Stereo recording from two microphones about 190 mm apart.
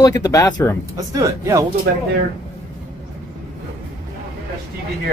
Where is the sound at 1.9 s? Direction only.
55° right (ahead or behind).